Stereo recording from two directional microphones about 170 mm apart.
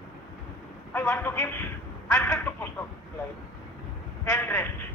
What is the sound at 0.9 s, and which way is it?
Speech, 15° left (ahead or behind).